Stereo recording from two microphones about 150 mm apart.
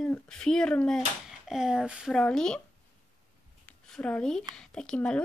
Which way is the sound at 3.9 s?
5° left (ahead or behind).